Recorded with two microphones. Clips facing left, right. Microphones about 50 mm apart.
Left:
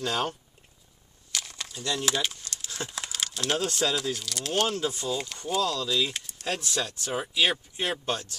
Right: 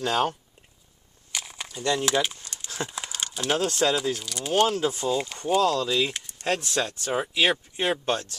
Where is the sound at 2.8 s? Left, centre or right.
Centre.